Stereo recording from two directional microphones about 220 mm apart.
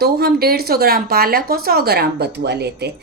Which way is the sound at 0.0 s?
45° right (ahead or behind).